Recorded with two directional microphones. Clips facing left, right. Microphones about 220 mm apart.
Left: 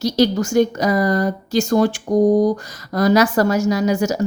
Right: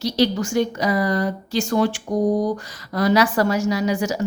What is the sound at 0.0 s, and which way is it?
A woman's voice, 45° left (ahead or behind).